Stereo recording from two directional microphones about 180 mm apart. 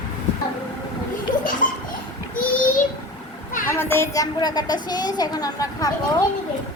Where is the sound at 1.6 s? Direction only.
50° left (ahead or behind).